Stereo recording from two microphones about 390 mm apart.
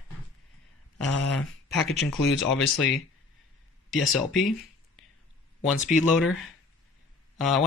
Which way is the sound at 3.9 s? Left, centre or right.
Centre.